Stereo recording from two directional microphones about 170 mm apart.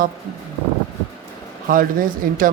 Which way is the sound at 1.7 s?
55° right (ahead or behind).